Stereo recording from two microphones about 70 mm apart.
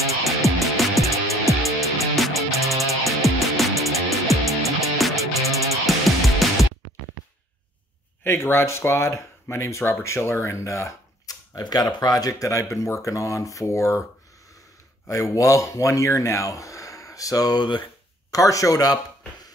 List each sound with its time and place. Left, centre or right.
0.1 s music: centre
8.2 s speech: left
11.2 s speech: left
15.0 s speech: left
18.3 s speech: left